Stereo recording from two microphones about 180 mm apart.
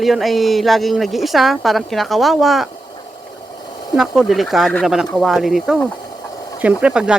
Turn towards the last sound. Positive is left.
turn(degrees=-5)  # may be behind; listen again after turning